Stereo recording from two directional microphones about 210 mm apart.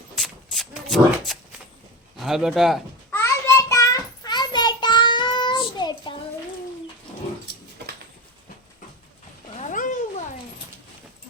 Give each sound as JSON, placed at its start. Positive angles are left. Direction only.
{"t": 0.2, "sound": "a sound", "side_deg": 0}
{"t": 2.1, "sound": "speech", "side_deg": 0}
{"t": 3.1, "sound": "child singing", "side_deg": 10}
{"t": 9.6, "sound": "cat", "side_deg": 35}